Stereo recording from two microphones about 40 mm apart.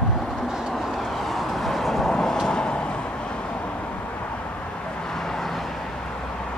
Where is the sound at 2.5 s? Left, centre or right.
Left.